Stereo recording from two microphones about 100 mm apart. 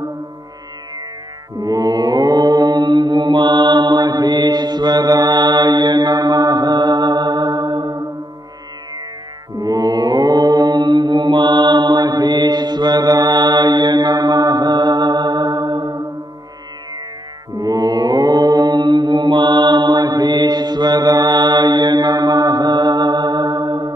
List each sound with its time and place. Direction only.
1.6 s mantra: 40° right (ahead or behind)
9.6 s mantra: 40° right (ahead or behind)
17.6 s mantra: 40° right (ahead or behind)